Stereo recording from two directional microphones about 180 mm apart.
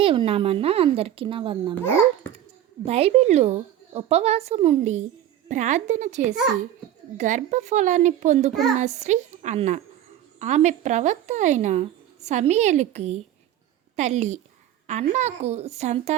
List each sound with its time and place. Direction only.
0.0 s speech: 30° right (ahead or behind)
2.8 s a woman's voice: 35° right (ahead or behind)